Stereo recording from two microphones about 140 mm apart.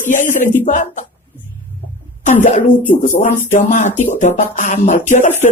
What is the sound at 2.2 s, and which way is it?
Speech, 60° left (ahead or behind).